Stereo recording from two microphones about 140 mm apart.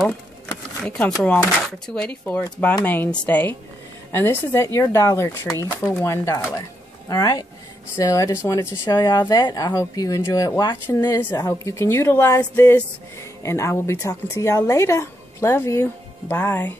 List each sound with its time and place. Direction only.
0.8 s speech: 10° left (ahead or behind)